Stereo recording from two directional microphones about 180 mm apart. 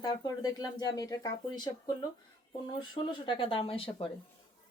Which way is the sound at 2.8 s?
25° left (ahead or behind).